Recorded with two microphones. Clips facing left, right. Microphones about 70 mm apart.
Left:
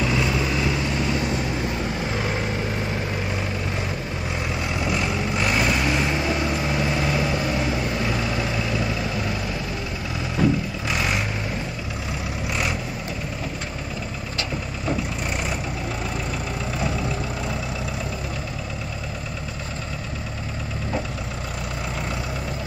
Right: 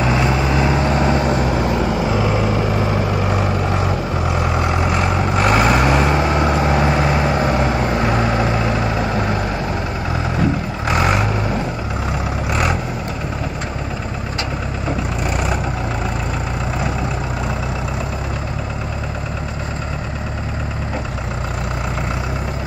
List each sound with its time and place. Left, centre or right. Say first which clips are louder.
0.0 s vehicle: right 5 dB; right
4.4 s vehicle: right 7 dB; right
10.9 s vehicle: right 8 dB; right